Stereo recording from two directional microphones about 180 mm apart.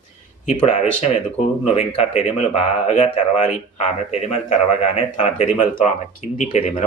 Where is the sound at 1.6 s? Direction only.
35° left (ahead or behind).